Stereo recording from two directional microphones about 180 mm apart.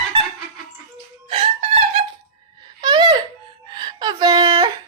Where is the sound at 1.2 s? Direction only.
35° right (ahead or behind).